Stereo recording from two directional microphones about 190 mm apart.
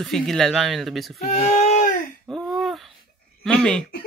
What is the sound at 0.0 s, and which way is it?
Speech, centre (ahead or behind).